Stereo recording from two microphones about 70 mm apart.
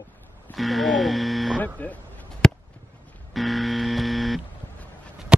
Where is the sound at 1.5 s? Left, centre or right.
Left.